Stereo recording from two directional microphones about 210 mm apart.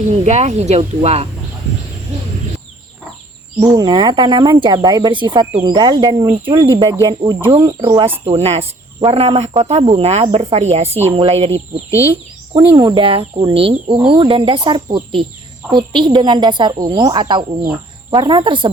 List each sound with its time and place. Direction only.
0.3 s speech: 35° right (ahead or behind)
3.6 s speech: 20° right (ahead or behind)
11.9 s speech: 15° left (ahead or behind)
12.5 s speech: 20° right (ahead or behind)